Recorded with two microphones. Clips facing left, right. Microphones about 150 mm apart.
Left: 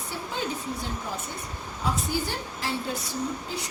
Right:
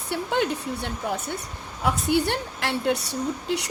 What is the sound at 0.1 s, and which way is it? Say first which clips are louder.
A woman's voice: right 8 dB; 70° right (ahead or behind).